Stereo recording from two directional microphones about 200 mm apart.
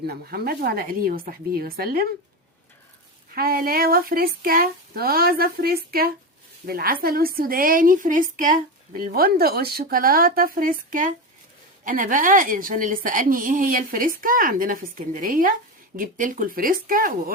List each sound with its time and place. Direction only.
0.0 s a woman's voice: 50° right (ahead or behind)
3.3 s a woman's voice: 50° right (ahead or behind)